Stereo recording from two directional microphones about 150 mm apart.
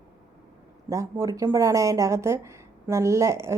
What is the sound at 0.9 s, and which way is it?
A woman's voice, 20° right (ahead or behind).